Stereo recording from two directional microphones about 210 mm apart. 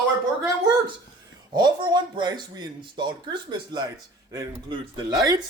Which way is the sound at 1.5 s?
20° right (ahead or behind).